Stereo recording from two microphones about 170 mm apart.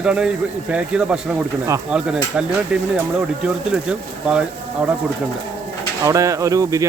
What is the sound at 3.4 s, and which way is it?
Speech, 5° right (ahead or behind).